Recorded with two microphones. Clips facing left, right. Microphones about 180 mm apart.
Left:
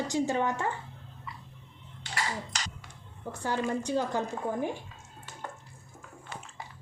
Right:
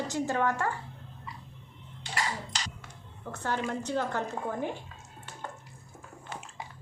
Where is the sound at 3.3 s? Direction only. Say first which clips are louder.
Left 2 dB; 15° left (ahead or behind).